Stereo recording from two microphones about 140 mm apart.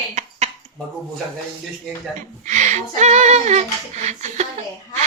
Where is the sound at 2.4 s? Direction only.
60° right (ahead or behind).